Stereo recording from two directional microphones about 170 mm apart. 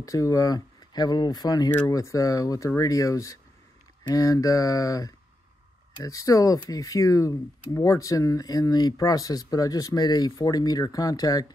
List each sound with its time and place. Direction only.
0.0 s speech: 20° left (ahead or behind)